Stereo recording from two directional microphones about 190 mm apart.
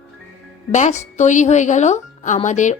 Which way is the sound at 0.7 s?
40° left (ahead or behind).